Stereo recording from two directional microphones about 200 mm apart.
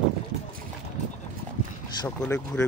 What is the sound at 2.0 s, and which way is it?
Speech, 10° left (ahead or behind).